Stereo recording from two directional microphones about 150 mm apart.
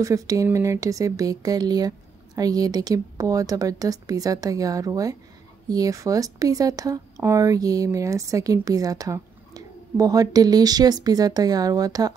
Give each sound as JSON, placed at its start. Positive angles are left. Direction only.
{"t": 0.0, "sound": "speech", "side_deg": -20}